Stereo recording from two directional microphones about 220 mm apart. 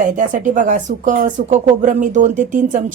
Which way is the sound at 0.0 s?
35° right (ahead or behind).